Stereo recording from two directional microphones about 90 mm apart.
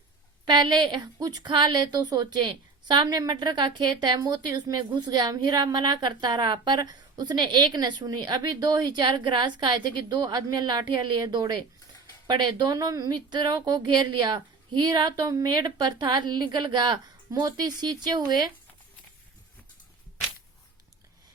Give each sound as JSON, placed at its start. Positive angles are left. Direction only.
{"t": 0.4, "sound": "a woman's voice", "side_deg": -55}
{"t": 13.1, "sound": "a woman's voice", "side_deg": -55}
{"t": 15.4, "sound": "a woman's voice", "side_deg": -55}